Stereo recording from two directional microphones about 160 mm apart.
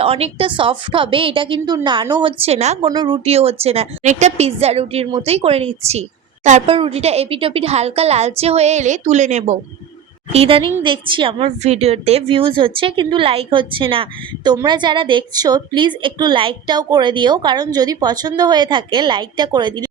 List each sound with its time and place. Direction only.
0.0 s a woman's voice: 35° right (ahead or behind)
2.8 s a woman's voice: 25° right (ahead or behind)
3.2 s a woman's voice: 40° right (ahead or behind)
10.3 s a woman's voice: 35° right (ahead or behind)